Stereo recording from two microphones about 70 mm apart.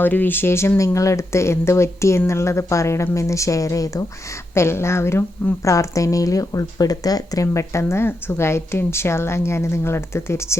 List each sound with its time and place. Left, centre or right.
0.0 s a woman's voice: left
0.9 s speech: left
4.5 s a woman's voice: left
5.6 s speech: left
7.4 s a woman's voice: left